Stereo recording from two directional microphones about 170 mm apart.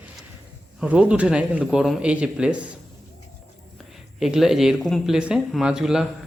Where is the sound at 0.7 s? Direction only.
5° right (ahead or behind).